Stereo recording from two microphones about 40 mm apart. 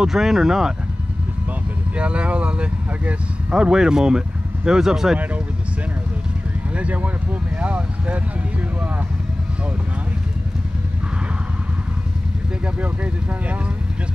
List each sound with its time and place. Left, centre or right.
0.0 s speech: centre
2.0 s speech: right
3.5 s speech: centre
6.7 s speech: right